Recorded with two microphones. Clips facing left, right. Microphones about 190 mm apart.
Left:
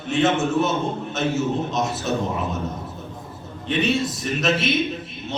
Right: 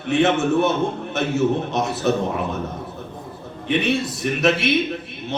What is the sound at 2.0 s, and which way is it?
Speech, 60° right (ahead or behind).